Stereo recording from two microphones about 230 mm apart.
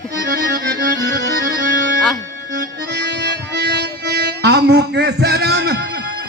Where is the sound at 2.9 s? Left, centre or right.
Right.